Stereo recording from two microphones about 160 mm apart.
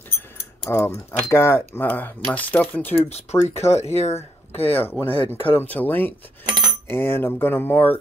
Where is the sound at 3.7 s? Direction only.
40° left (ahead or behind).